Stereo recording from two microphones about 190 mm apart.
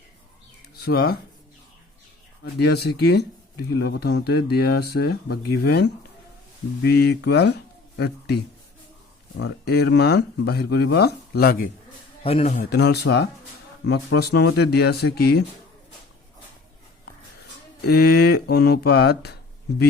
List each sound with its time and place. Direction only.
0.8 s speech: 55° left (ahead or behind)
2.4 s speech: 60° left (ahead or behind)
9.4 s speech: 55° left (ahead or behind)
12.2 s a man's voice: 35° left (ahead or behind)
12.7 s speech: 60° left (ahead or behind)
17.8 s speech: 55° left (ahead or behind)